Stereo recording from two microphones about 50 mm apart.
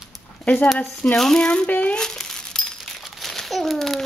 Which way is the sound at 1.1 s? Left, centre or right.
Centre.